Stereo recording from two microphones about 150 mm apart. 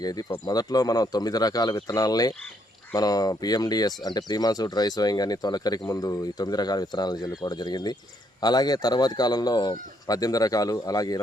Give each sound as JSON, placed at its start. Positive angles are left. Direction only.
{"t": 0.0, "sound": "speech", "side_deg": 25}